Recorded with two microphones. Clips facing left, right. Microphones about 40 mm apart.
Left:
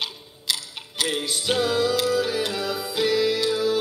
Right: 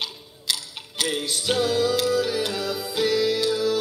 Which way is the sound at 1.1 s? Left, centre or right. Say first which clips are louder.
Even; centre.